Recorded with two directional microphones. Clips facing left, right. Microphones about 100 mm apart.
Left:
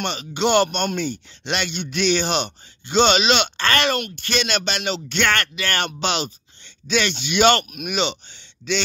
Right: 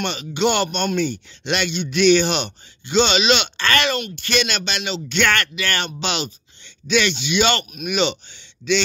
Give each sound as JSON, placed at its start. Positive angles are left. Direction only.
{"t": 0.0, "sound": "speech", "side_deg": 35}
{"t": 1.7, "sound": "speech", "side_deg": 45}
{"t": 2.0, "sound": "speech", "side_deg": 35}
{"t": 3.9, "sound": "speech", "side_deg": 50}
{"t": 5.2, "sound": "speech", "side_deg": 35}
{"t": 7.9, "sound": "speech", "side_deg": 25}
{"t": 8.3, "sound": "speech", "side_deg": 40}